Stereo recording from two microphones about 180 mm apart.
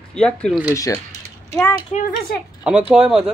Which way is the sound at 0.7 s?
15° left (ahead or behind).